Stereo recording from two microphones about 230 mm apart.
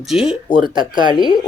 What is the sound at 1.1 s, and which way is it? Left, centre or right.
Speech, centre.